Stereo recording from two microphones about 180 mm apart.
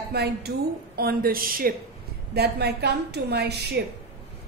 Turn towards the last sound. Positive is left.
turn(degrees=-65)  # may be behind; listen again after turning